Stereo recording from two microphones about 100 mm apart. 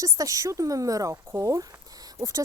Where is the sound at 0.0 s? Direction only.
35° right (ahead or behind).